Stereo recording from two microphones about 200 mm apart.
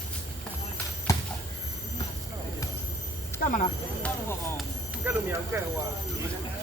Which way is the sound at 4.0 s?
5° left (ahead or behind).